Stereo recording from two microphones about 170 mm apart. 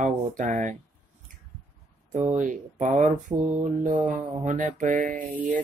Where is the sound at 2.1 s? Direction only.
45° right (ahead or behind).